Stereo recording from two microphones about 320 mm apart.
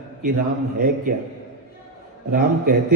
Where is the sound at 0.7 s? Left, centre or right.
Right.